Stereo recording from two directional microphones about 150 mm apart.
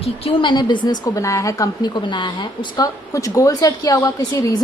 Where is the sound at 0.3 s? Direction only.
35° left (ahead or behind).